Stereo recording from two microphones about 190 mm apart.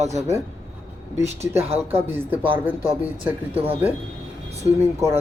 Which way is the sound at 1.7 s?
10° right (ahead or behind).